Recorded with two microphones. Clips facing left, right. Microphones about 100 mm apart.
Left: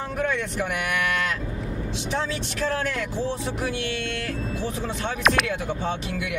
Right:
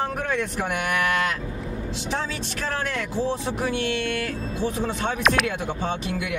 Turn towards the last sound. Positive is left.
turn(degrees=0)  # may be behind; listen again after turning